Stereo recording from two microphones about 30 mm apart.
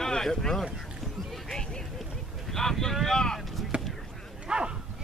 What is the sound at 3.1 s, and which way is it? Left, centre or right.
Vehicle, left.